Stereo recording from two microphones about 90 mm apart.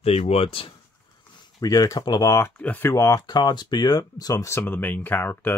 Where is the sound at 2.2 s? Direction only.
35° left (ahead or behind).